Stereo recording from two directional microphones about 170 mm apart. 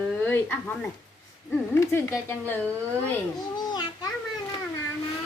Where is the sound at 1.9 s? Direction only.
15° left (ahead or behind).